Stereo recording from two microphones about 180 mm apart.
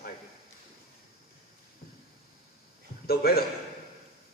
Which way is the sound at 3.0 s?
60° left (ahead or behind).